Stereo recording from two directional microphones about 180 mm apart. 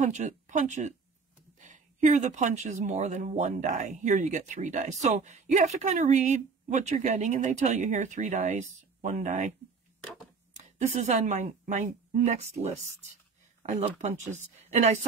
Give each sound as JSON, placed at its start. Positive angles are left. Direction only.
{"t": 0.0, "sound": "speech", "side_deg": -40}
{"t": 10.0, "sound": "a sound", "side_deg": 5}
{"t": 11.2, "sound": "speech", "side_deg": -40}